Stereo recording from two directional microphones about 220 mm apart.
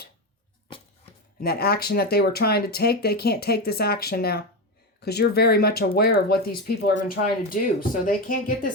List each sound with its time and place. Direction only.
1.4 s speech: 45° left (ahead or behind)